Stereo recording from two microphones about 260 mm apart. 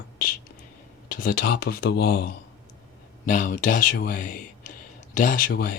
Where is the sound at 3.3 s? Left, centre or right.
Left.